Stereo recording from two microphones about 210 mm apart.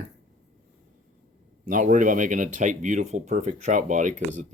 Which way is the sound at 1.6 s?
40° right (ahead or behind).